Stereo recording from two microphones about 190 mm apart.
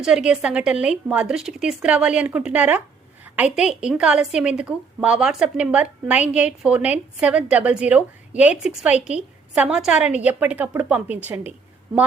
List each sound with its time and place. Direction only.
0.0 s a woman's voice: 5° right (ahead or behind)